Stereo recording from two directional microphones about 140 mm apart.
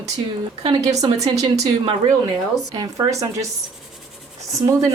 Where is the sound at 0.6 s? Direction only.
45° right (ahead or behind).